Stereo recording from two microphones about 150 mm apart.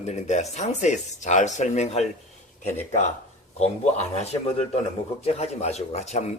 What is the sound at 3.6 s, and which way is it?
Speech, 45° left (ahead or behind).